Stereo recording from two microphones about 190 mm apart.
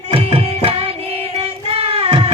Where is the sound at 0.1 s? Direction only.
30° right (ahead or behind).